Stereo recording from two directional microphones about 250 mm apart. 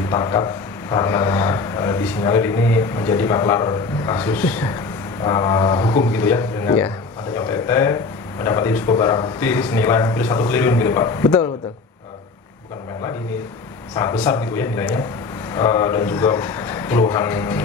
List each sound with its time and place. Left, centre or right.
0.1 s speech: centre
13.9 s speech: centre